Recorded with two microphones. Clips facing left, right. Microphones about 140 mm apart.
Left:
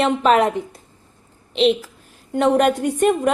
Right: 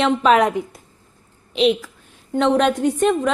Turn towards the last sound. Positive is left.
turn(degrees=10)  # may be behind; listen again after turning